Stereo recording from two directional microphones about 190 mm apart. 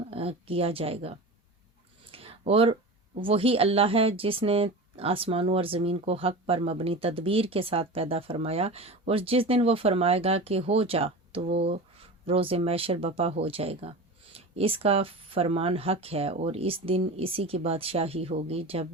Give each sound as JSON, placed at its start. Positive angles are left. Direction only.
{"t": 0.1, "sound": "speech", "side_deg": -30}
{"t": 2.0, "sound": "a sound", "side_deg": -30}
{"t": 3.2, "sound": "speech", "side_deg": -30}